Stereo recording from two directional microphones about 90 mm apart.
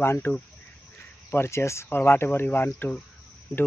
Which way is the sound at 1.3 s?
30° left (ahead or behind).